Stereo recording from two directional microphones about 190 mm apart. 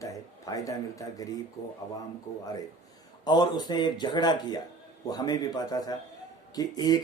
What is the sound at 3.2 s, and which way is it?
Speech, 20° left (ahead or behind).